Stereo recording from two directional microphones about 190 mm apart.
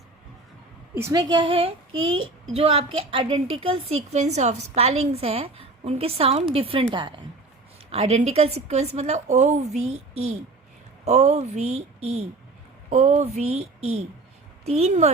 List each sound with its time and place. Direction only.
0.9 s a woman's voice: 15° right (ahead or behind)
2.0 s a child's voice: 90° right
2.5 s a woman's voice: 30° right (ahead or behind)
12.9 s a woman's voice: 35° right (ahead or behind)